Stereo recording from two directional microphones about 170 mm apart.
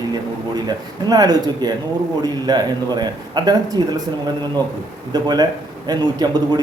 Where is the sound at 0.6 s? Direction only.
20° right (ahead or behind).